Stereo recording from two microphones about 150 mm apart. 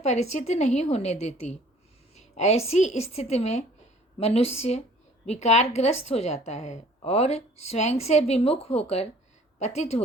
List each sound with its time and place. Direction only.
0.0 s a woman's voice: 50° left (ahead or behind)